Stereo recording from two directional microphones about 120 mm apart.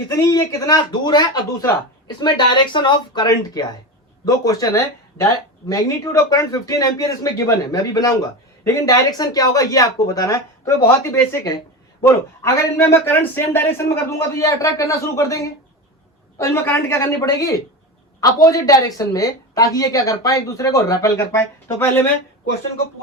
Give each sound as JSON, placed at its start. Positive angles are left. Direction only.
{"t": 0.1, "sound": "speech", "side_deg": 25}
{"t": 16.4, "sound": "speech", "side_deg": 20}